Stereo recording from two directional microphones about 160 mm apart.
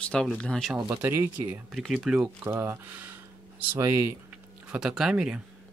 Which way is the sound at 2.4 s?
15° right (ahead or behind).